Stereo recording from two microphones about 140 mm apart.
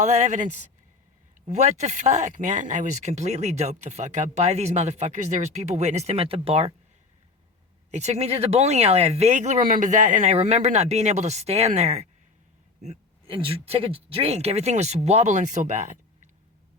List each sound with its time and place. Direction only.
0.0 s a woman's voice: 55° right (ahead or behind)
7.9 s speech: 55° right (ahead or behind)
12.8 s a sound: 50° right (ahead or behind)
13.3 s speech: 40° right (ahead or behind); by 16.3 s 55° right (ahead or behind)